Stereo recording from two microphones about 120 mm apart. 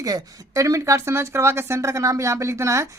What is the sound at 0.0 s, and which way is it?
Speech, 30° right (ahead or behind).